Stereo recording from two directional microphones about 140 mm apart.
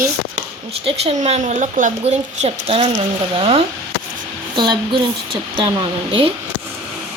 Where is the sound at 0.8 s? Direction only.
50° right (ahead or behind); by 5.0 s 35° right (ahead or behind).